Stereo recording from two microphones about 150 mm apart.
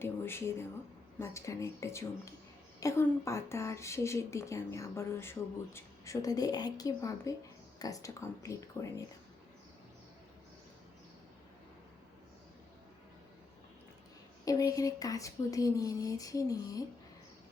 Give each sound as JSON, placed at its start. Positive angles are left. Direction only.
{"t": 0.0, "sound": "speech", "side_deg": 15}
{"t": 14.4, "sound": "speech", "side_deg": 25}